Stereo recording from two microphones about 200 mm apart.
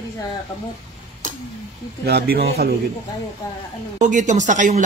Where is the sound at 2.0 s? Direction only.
50° right (ahead or behind).